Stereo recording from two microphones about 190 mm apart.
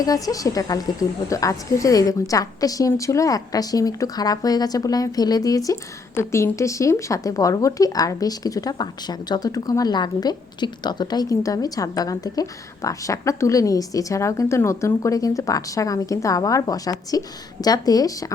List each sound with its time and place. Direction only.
0.0 s a woman's voice: 20° left (ahead or behind)